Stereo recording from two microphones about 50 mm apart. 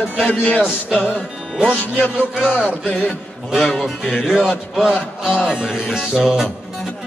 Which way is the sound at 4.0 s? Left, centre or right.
Centre.